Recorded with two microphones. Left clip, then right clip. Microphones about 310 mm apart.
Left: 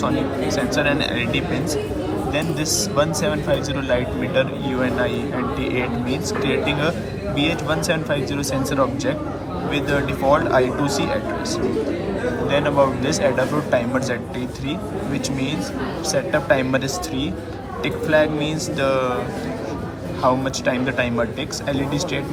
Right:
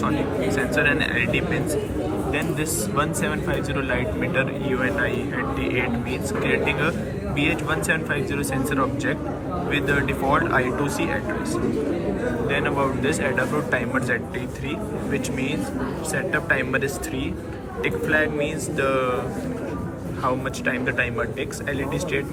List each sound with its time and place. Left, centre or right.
0.0 s speech: centre
2.9 s speech: centre
9.7 s speech: centre
12.5 s speech: centre
16.3 s speech: centre
20.2 s speech: centre